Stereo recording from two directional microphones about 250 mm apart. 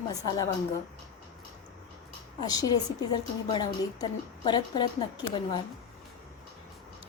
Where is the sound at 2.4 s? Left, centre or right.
Centre.